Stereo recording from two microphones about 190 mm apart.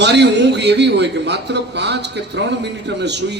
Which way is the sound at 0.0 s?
65° right (ahead or behind).